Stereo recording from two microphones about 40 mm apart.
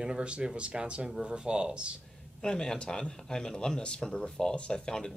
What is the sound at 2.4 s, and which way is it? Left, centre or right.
Speech, centre.